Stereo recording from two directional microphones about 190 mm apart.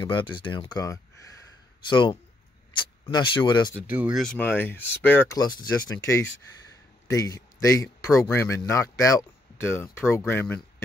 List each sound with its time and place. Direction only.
0.0 s speech: 25° left (ahead or behind)
3.8 s speech: 10° right (ahead or behind)
4.2 s speech: 5° left (ahead or behind)